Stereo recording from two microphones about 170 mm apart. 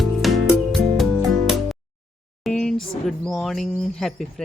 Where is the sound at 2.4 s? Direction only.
5° left (ahead or behind).